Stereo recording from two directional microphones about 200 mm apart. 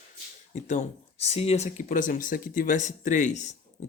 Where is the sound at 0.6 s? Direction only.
35° left (ahead or behind).